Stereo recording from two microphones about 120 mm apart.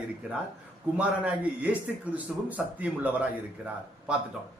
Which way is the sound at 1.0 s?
10° right (ahead or behind).